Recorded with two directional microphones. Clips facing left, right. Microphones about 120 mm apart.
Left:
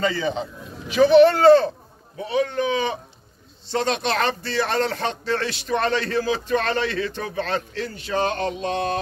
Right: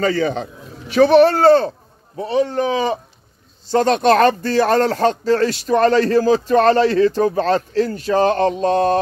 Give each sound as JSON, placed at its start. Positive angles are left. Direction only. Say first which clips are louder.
{"t": 0.1, "sound": "a man's voice", "louder": "right 6 dB", "side_deg": -55}
{"t": 1.0, "sound": "speech", "louder": "right 1 dB", "side_deg": -40}